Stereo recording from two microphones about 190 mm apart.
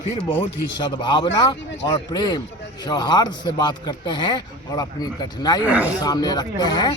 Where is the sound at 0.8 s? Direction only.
25° left (ahead or behind).